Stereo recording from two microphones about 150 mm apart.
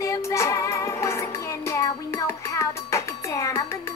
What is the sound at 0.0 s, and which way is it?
Music, 20° left (ahead or behind).